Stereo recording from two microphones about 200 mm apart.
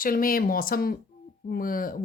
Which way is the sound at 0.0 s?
45° left (ahead or behind).